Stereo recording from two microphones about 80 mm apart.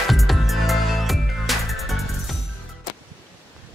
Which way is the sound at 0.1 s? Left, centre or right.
Centre.